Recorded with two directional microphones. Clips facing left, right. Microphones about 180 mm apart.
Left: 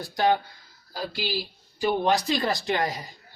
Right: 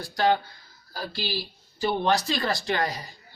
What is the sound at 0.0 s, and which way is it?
Speech, 20° left (ahead or behind).